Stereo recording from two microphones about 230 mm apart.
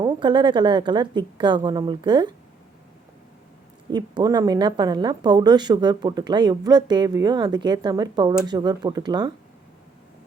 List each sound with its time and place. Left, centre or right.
0.0 s a woman's voice: centre
3.9 s speech: centre